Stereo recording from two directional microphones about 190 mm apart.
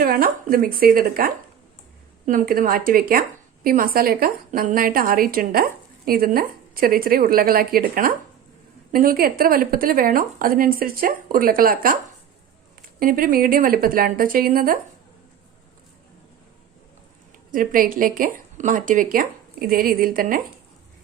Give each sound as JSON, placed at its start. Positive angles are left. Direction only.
{"t": 0.0, "sound": "a woman's voice", "side_deg": -50}
{"t": 13.0, "sound": "a woman's voice", "side_deg": -50}
{"t": 17.5, "sound": "a woman's voice", "side_deg": -45}